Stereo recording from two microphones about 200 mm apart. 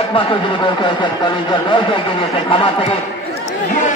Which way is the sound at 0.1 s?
25° left (ahead or behind).